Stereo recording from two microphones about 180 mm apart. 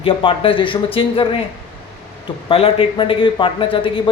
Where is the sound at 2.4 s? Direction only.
30° left (ahead or behind).